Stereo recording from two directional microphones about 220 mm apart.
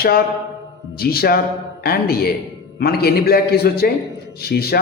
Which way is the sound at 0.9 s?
45° left (ahead or behind).